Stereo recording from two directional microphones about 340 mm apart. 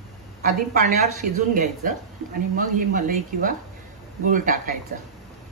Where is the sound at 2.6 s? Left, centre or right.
Right.